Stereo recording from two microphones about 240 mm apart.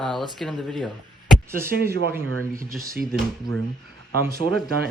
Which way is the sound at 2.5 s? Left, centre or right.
Right.